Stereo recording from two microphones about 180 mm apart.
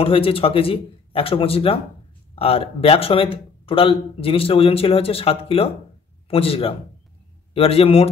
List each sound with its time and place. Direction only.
0.0 s speech: 30° left (ahead or behind)